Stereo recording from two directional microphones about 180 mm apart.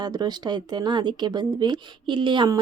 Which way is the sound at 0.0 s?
20° right (ahead or behind).